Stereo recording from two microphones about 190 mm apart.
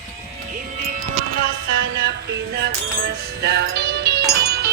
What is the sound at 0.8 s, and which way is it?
Music, 45° right (ahead or behind).